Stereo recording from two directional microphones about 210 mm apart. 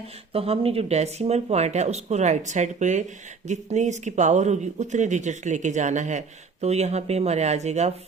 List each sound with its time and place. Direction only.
0.3 s speech: 25° right (ahead or behind)